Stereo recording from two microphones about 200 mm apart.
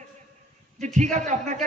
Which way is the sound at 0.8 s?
35° right (ahead or behind).